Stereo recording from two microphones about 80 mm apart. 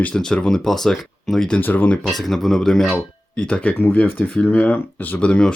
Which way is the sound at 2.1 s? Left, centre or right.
Centre.